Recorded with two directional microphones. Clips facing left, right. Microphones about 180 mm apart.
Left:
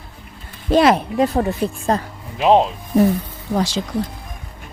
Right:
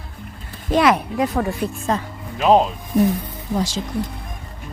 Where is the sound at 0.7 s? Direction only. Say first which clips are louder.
Left 3 dB; 30° left (ahead or behind).